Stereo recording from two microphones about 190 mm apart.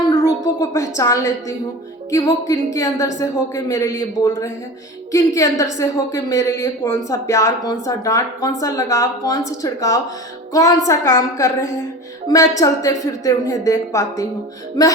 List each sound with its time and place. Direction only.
0.1 s a woman's voice: 15° left (ahead or behind)